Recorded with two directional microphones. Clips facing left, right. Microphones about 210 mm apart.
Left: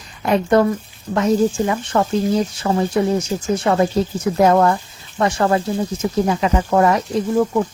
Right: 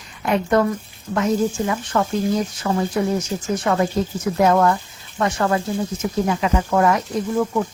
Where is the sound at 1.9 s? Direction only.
30° left (ahead or behind).